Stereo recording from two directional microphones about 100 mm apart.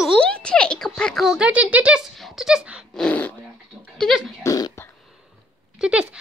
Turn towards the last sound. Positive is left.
turn(degrees=-10)  # may be behind; listen again after turning